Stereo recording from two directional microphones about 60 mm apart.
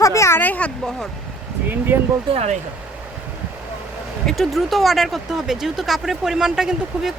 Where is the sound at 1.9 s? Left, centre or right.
Right.